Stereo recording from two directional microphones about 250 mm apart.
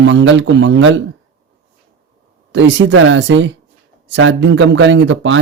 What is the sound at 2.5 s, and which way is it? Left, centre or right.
Speech, right.